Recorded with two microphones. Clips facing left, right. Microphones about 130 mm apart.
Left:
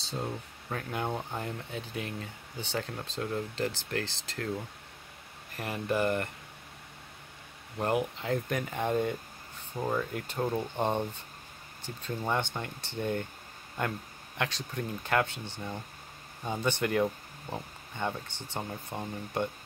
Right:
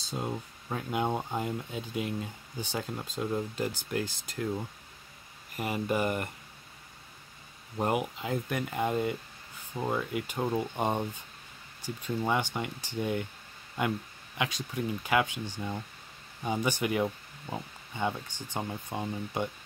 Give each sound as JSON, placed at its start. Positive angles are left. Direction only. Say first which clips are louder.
{"t": 0.2, "sound": "speech", "louder": "right 2 dB", "side_deg": -10}
{"t": 5.6, "sound": "speech", "louder": "even", "side_deg": -10}
{"t": 7.8, "sound": "speech", "louder": "even", "side_deg": -10}
{"t": 14.4, "sound": "speech", "louder": "right 2 dB", "side_deg": -10}